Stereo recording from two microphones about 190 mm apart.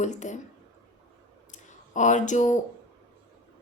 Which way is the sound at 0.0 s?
40° left (ahead or behind).